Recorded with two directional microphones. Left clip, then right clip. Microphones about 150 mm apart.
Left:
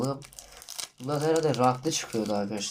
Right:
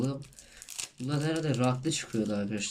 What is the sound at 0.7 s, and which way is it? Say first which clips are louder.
Crumpling: left 1 dB; 10° right (ahead or behind).